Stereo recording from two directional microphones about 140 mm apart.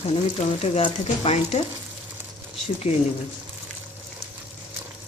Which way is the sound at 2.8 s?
45° left (ahead or behind).